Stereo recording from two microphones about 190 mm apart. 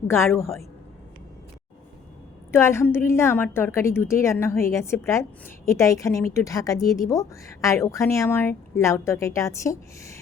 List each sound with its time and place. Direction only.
0.1 s a woman's voice: 15° left (ahead or behind)
2.5 s a woman's voice: 15° left (ahead or behind)